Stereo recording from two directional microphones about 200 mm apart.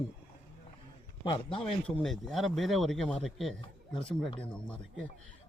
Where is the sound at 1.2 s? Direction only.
25° left (ahead or behind).